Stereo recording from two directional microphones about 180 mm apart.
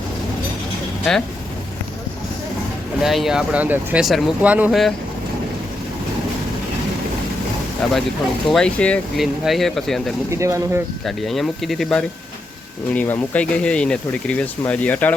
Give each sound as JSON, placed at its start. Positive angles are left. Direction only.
{"t": 1.1, "sound": "speech", "side_deg": 0}
{"t": 3.0, "sound": "speech", "side_deg": 0}
{"t": 7.8, "sound": "speech", "side_deg": 5}
{"t": 10.2, "sound": "speech", "side_deg": -15}
{"t": 11.0, "sound": "speech", "side_deg": 0}